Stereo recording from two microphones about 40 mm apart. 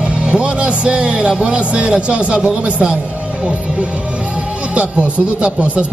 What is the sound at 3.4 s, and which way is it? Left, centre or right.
Speech, right.